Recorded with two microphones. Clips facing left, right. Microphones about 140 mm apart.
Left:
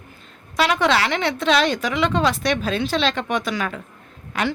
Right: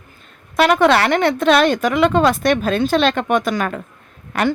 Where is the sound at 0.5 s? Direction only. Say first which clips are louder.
Right 6 dB; 50° right (ahead or behind).